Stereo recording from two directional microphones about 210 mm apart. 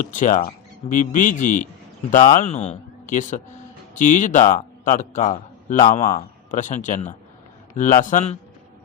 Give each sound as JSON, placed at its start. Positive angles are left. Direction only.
{"t": 0.0, "sound": "a man's voice", "side_deg": 40}